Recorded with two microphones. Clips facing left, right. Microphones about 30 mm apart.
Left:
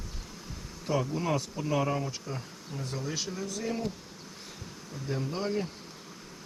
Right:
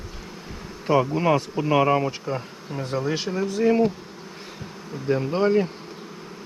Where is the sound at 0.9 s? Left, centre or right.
Right.